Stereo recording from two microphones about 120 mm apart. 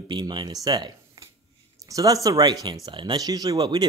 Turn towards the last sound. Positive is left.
turn(degrees=-35)  # may be behind; listen again after turning